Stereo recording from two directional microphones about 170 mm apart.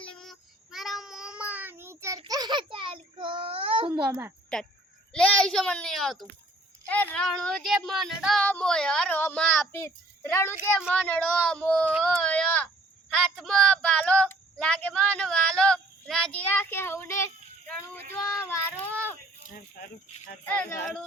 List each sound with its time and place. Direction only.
0.2 s child singing: centre (ahead or behind); by 4.0 s 30° right (ahead or behind)
4.5 s speech: 5° left (ahead or behind)
10.5 s speech: 5° right (ahead or behind)
10.9 s speech: 10° left (ahead or behind)
17.9 s child singing: 15° left (ahead or behind)
20.4 s speech: 10° left (ahead or behind)